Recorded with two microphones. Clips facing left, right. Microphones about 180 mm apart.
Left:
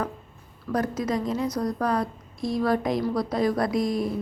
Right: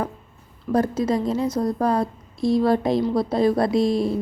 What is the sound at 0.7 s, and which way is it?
A woman's voice, 30° right (ahead or behind).